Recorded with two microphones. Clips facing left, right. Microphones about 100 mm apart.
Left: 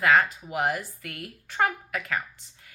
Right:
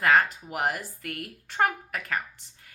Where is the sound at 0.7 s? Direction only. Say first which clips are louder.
Left 2 dB; 50° right (ahead or behind).